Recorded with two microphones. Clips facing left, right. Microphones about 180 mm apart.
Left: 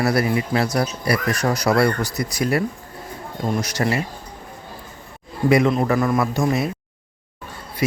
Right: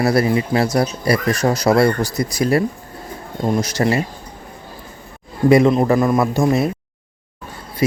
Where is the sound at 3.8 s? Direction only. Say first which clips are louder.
Right 4 dB; 30° right (ahead or behind).